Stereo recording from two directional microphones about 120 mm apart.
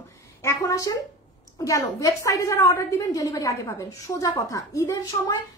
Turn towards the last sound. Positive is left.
turn(degrees=25)  # may be behind; listen again after turning